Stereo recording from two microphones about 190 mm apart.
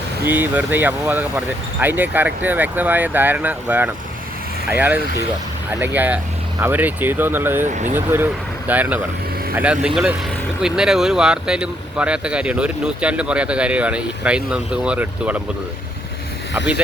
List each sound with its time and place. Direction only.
0.3 s speech: 10° right (ahead or behind)
7.7 s speech: 40° right (ahead or behind)
7.9 s speech: 10° right (ahead or behind)